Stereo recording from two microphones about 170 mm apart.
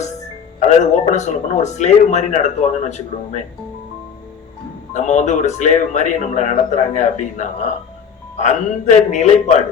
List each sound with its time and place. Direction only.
0.6 s a man's voice: 45° left (ahead or behind)
4.9 s a man's voice: 45° left (ahead or behind)